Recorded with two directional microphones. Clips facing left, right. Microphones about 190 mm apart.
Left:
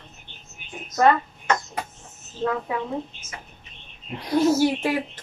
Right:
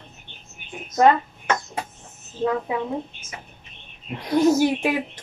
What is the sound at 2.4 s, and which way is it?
Speech, 15° right (ahead or behind).